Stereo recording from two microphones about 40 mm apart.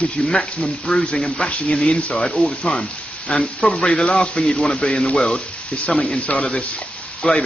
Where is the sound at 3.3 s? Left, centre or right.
Centre.